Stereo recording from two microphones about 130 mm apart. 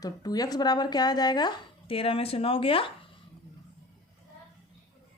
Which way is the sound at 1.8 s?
45° left (ahead or behind).